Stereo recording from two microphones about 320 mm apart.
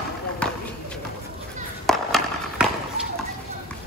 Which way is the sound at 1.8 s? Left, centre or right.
Centre.